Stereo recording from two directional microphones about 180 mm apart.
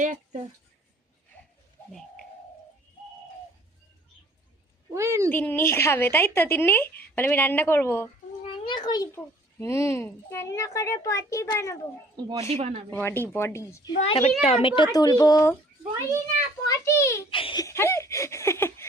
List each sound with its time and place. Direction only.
1.9 s bird: 5° left (ahead or behind)
4.9 s speech: 15° right (ahead or behind)
5.3 s a child's voice: 10° left (ahead or behind)
8.6 s a child's voice: 25° left (ahead or behind)
12.1 s speech: 30° right (ahead or behind)
12.9 s a child's voice: 10° left (ahead or behind)
14.0 s a child's voice: 35° left (ahead or behind); by 15.5 s 20° left (ahead or behind)
16.6 s a child's voice: 15° left (ahead or behind)
17.3 s a child's voice: 25° left (ahead or behind)